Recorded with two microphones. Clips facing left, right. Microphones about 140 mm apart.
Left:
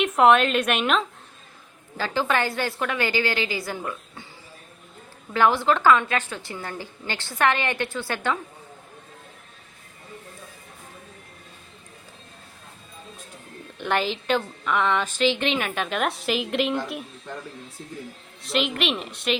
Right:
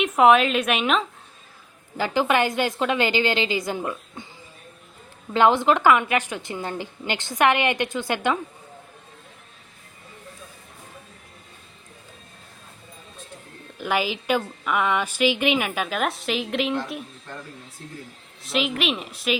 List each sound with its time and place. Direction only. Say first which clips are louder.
0.0 s a woman's voice: right 1 dB; centre (ahead or behind)
2.0 s a woman's voice: right 3 dB; 15° right (ahead or behind)
5.3 s a woman's voice: right 2 dB; 20° right (ahead or behind)
13.7 s a woman's voice: even; 5° right (ahead or behind)
18.4 s a woman's voice: even; centre (ahead or behind)